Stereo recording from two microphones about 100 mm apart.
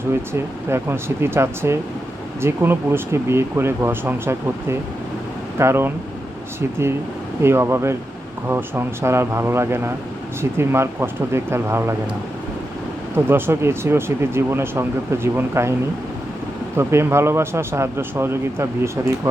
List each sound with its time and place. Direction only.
0.7 s a man's voice: 25° right (ahead or behind)
13.1 s a man's voice: 25° right (ahead or behind)
16.7 s a man's voice: 25° right (ahead or behind)